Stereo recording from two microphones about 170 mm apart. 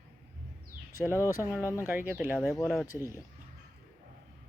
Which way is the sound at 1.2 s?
20° left (ahead or behind).